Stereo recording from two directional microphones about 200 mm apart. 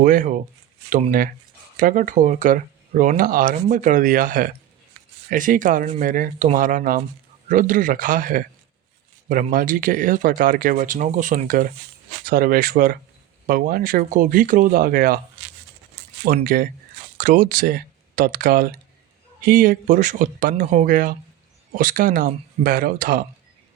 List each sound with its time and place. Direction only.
0.0 s speech: 40° right (ahead or behind)
16.2 s speech: 45° right (ahead or behind)